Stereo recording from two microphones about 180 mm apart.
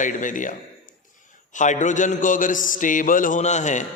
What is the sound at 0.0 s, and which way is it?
Speech, 45° left (ahead or behind).